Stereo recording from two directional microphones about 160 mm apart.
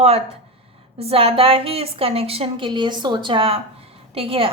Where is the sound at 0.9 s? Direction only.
35° right (ahead or behind).